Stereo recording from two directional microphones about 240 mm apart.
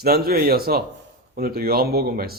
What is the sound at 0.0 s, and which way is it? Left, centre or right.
A man's voice, right.